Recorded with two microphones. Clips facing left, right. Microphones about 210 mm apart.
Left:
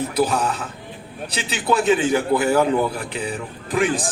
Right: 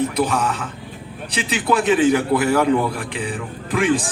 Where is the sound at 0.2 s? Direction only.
35° left (ahead or behind).